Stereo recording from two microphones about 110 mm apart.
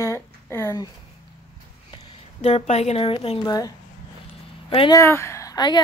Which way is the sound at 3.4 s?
35° left (ahead or behind).